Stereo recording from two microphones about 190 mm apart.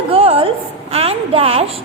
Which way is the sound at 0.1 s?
30° right (ahead or behind).